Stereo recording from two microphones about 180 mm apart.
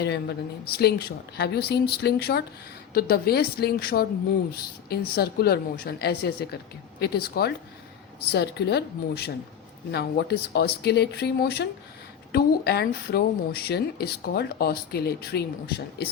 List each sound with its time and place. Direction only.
0.0 s a woman's voice: 70° left (ahead or behind)